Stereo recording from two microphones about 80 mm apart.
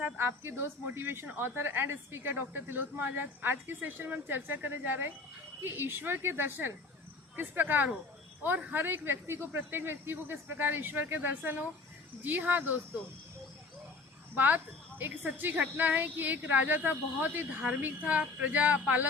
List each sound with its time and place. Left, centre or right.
0.0 s a woman's voice: right
14.3 s a woman's voice: right